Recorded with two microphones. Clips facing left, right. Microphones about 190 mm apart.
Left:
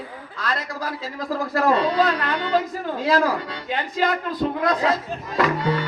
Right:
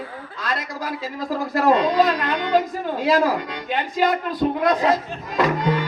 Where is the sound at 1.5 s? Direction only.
15° right (ahead or behind).